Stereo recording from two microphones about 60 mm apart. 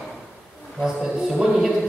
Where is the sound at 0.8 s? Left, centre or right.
Centre.